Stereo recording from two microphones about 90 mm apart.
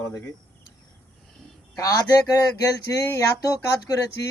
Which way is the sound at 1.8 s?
40° left (ahead or behind).